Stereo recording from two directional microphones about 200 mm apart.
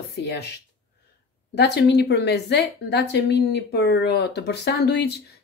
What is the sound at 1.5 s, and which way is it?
Speech, 55° left (ahead or behind).